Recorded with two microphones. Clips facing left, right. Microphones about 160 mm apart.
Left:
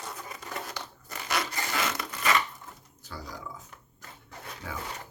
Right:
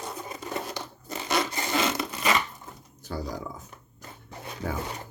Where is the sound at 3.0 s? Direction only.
45° right (ahead or behind).